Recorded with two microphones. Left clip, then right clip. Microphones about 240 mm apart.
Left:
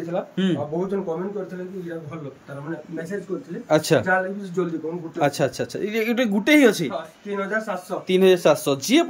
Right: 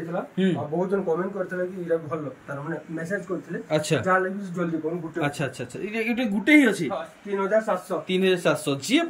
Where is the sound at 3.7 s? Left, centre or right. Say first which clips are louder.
Left 6 dB; centre.